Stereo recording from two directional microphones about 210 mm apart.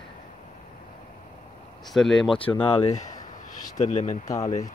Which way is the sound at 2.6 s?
25° left (ahead or behind).